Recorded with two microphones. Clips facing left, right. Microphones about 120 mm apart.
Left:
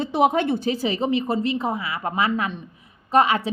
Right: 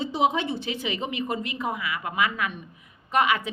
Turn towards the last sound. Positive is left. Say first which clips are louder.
# left 4 dB
turn(degrees=35)  # may be behind; listen again after turning